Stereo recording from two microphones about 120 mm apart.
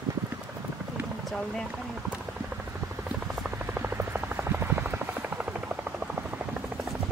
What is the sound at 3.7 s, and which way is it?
Helicopter, 20° right (ahead or behind).